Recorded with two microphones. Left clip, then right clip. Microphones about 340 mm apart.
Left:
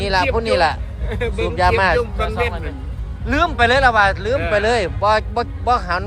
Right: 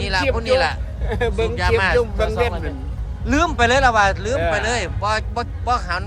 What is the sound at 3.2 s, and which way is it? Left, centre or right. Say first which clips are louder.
A man's voice: left 1 dB; centre.